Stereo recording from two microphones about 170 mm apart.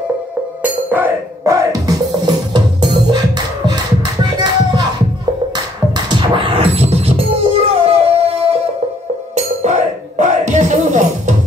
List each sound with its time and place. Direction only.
0.6 s music: 10° right (ahead or behind)
5.9 s music: 25° right (ahead or behind)
9.3 s music: 45° right (ahead or behind)